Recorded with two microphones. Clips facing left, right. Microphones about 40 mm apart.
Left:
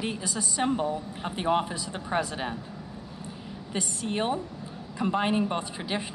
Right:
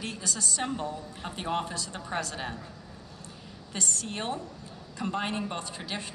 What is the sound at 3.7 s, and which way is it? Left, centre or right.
Speech, centre.